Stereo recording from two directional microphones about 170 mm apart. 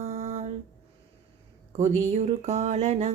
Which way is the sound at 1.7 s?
40° right (ahead or behind).